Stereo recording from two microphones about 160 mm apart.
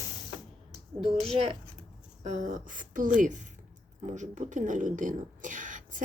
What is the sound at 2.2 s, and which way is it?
A woman's voice, 50° right (ahead or behind).